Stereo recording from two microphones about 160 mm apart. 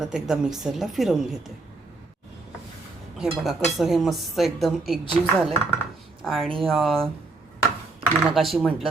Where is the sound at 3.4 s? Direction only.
Centre (ahead or behind).